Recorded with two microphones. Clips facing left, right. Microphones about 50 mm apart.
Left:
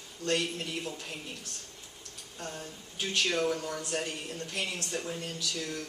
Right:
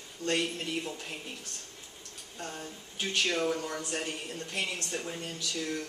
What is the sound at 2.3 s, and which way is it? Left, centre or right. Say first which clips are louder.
Speech: even; centre.